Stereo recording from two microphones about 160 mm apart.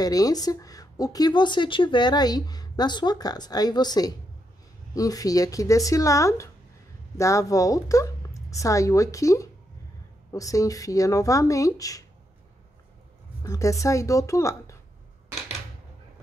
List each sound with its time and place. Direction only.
0.0 s a woman's voice: 25° left (ahead or behind)
13.4 s a woman's voice: 20° left (ahead or behind)